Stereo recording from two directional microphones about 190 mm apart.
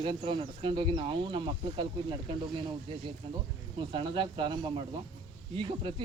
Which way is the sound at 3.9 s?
25° right (ahead or behind).